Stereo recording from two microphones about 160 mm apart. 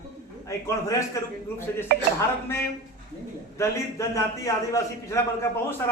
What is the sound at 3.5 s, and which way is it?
A man's voice, 20° left (ahead or behind).